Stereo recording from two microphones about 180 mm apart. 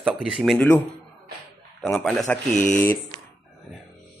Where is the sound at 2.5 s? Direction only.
45° left (ahead or behind).